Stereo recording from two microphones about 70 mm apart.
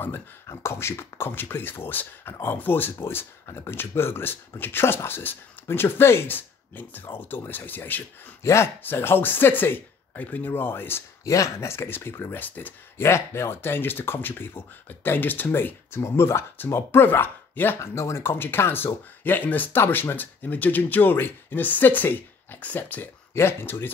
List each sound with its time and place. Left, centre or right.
0.5 s speech: left
8.4 s speech: left
11.2 s speech: left
13.0 s speech: left